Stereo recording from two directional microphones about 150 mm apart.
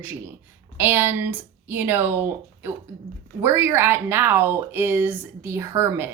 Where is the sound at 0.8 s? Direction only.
15° right (ahead or behind).